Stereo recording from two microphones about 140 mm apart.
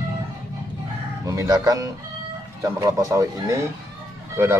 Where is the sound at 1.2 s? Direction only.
25° right (ahead or behind).